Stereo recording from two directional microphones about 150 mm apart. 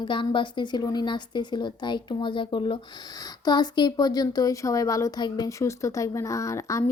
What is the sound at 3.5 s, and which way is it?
Speech, 30° left (ahead or behind).